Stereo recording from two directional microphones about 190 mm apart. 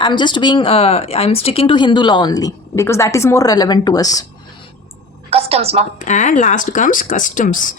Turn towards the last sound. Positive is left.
turn(degrees=45)  # may be behind; listen again after turning